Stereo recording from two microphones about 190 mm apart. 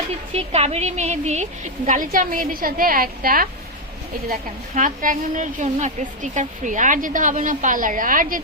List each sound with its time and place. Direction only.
0.3 s a woman's voice: 35° right (ahead or behind); by 3.5 s 50° right (ahead or behind)
4.7 s a woman's voice: 45° right (ahead or behind)